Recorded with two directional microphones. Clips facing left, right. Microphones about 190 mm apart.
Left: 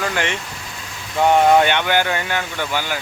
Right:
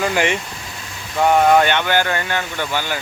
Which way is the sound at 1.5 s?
15° left (ahead or behind).